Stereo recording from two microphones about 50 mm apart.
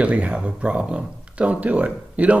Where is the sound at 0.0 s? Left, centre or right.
Right.